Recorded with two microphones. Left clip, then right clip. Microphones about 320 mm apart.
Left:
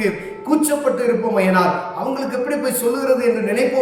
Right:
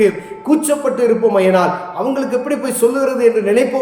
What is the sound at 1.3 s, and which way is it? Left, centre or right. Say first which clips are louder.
A man's voice: right 3 dB; centre.